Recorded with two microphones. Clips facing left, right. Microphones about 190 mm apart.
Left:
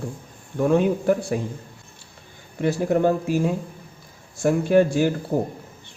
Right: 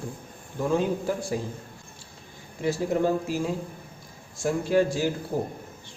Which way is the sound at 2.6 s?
60° left (ahead or behind).